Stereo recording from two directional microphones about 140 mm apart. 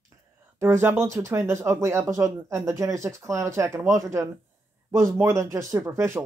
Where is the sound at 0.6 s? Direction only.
20° right (ahead or behind).